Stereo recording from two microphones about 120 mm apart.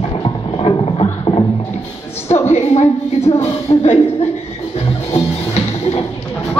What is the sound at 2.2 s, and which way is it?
Music, 65° left (ahead or behind).